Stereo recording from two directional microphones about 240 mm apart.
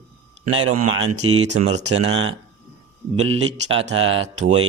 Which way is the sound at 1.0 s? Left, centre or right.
Right.